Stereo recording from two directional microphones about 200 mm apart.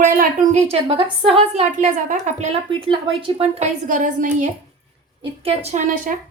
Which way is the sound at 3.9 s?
40° right (ahead or behind).